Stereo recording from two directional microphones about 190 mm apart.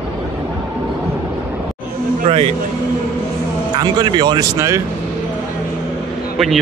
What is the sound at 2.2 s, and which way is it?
Speech, 30° right (ahead or behind).